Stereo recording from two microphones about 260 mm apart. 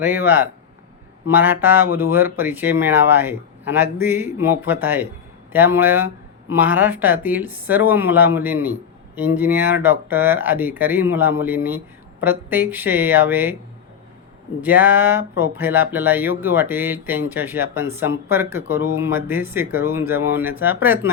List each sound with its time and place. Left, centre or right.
0.0 s speech: centre
14.6 s speech: centre